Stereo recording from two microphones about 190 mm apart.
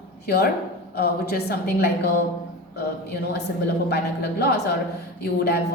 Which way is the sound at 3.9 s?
60° left (ahead or behind).